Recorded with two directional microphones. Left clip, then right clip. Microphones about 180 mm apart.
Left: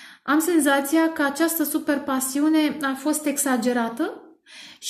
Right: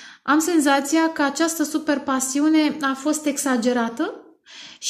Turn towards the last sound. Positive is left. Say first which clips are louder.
# right 2 dB
turn(degrees=-30)  # may be behind; listen again after turning